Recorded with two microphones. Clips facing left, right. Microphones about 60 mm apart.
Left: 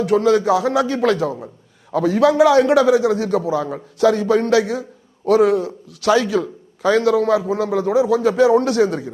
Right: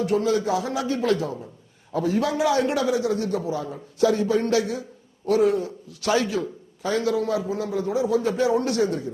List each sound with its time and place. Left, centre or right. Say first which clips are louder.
0.0 s a man's voice: left 7 dB; left